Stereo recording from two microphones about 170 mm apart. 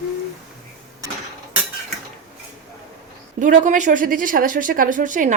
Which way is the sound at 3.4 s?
50° right (ahead or behind).